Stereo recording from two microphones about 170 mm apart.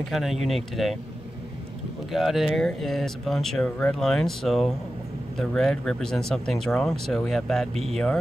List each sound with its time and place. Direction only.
0.1 s speech: centre (ahead or behind)
2.1 s speech: centre (ahead or behind)